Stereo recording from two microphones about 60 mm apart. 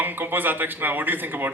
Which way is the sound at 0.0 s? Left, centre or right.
Right.